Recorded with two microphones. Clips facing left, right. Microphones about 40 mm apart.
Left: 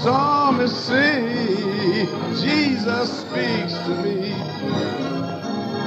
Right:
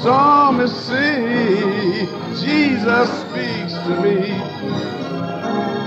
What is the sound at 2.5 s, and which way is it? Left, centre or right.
Music, right.